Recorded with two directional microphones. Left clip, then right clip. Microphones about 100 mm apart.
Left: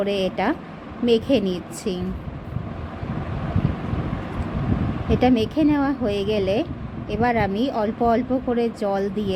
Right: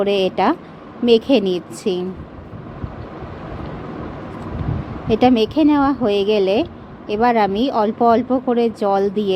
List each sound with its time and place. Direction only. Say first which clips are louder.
0.0 s speech: right 6 dB; 30° right (ahead or behind)
5.0 s a woman's voice: right 5 dB; 35° right (ahead or behind)